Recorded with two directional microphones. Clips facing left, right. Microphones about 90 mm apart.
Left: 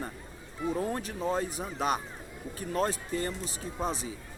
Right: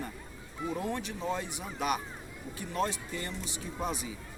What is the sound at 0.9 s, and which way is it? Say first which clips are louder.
Speech: left 3 dB; 40° left (ahead or behind).